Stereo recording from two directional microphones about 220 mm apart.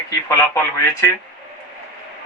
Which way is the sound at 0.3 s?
10° left (ahead or behind).